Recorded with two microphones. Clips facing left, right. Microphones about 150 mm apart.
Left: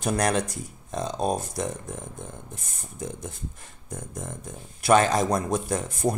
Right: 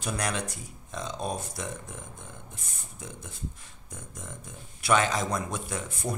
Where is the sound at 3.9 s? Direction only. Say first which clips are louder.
Left 8 dB; 45° left (ahead or behind).